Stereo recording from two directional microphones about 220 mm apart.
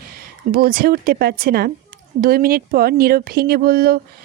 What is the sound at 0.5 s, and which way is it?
Speech, 45° right (ahead or behind).